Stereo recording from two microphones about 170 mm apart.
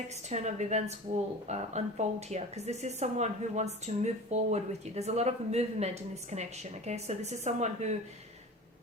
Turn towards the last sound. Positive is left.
turn(degrees=-40)  # may be behind; listen again after turning